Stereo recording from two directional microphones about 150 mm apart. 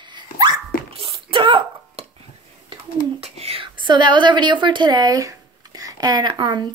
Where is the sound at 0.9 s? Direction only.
35° right (ahead or behind).